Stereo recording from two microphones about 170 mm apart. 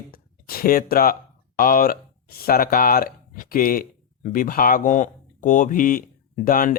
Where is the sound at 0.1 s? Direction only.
60° left (ahead or behind).